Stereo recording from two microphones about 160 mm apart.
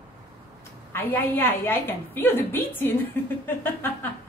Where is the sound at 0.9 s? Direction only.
15° left (ahead or behind).